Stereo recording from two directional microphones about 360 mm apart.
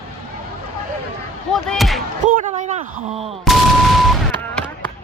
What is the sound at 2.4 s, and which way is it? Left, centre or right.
Speech, centre.